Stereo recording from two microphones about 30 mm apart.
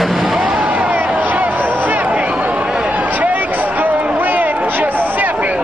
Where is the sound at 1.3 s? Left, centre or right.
Right.